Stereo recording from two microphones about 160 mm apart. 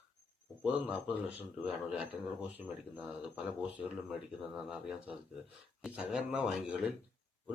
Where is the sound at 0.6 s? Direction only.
10° right (ahead or behind).